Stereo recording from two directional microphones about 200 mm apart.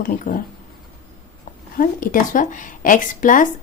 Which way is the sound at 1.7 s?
45° left (ahead or behind).